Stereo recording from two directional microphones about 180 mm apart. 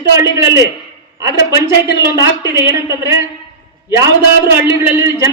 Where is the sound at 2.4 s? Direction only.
20° right (ahead or behind).